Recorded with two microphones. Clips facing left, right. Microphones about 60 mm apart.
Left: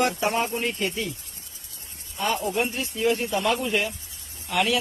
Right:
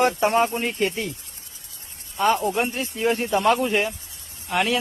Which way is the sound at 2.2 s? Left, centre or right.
Right.